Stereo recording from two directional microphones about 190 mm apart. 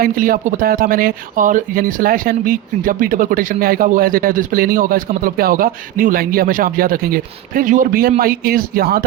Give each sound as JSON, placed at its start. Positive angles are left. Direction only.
{"t": 0.0, "sound": "speech", "side_deg": -50}